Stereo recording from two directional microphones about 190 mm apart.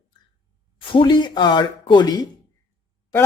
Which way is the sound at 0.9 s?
25° left (ahead or behind).